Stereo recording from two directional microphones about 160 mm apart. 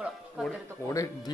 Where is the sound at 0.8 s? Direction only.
20° left (ahead or behind).